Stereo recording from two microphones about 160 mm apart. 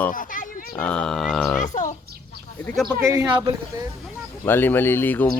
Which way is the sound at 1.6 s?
50° left (ahead or behind).